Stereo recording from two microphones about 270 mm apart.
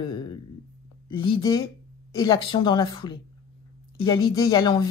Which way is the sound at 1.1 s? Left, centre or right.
Centre.